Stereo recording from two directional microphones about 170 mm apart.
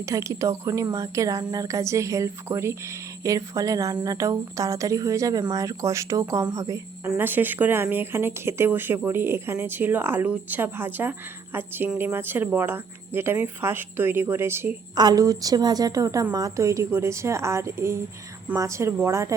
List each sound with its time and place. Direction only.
0.0 s a woman's voice: 15° right (ahead or behind)